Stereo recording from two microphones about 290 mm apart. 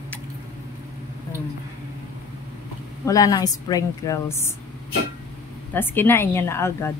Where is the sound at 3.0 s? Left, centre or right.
Centre.